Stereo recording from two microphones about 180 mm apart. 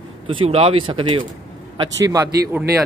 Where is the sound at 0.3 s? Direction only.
30° right (ahead or behind).